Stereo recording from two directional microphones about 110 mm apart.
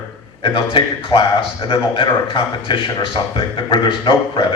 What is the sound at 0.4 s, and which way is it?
Speech, 50° left (ahead or behind).